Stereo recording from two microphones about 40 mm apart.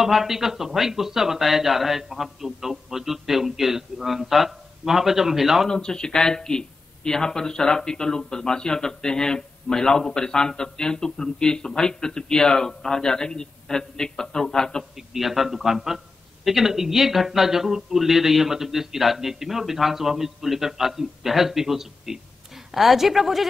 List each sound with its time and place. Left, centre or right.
0.0 s speech: centre
5.7 s speech: centre
15.0 s a woman's voice: centre